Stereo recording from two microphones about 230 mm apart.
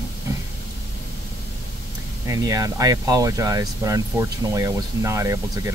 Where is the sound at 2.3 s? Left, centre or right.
Centre.